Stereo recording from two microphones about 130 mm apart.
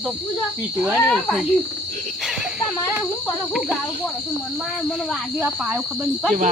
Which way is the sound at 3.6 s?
Centre (ahead or behind).